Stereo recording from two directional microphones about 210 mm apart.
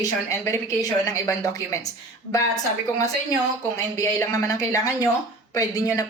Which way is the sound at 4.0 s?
15° left (ahead or behind).